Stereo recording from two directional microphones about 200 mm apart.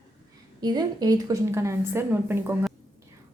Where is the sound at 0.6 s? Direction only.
20° right (ahead or behind).